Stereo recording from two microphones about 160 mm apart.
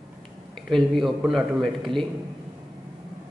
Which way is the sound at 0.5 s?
Centre (ahead or behind).